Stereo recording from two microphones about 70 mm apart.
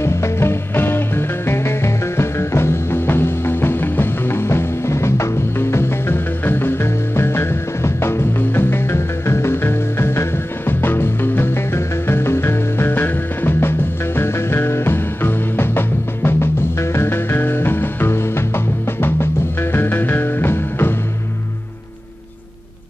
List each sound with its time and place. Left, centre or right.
0.0 s music: left